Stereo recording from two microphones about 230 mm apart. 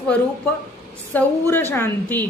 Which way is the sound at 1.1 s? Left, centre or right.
Centre.